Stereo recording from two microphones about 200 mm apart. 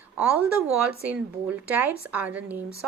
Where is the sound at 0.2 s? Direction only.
5° right (ahead or behind).